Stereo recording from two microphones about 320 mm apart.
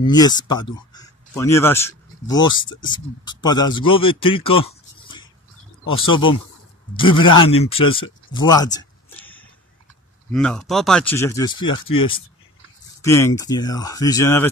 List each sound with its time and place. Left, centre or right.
0.0 s speech: centre
10.3 s speech: centre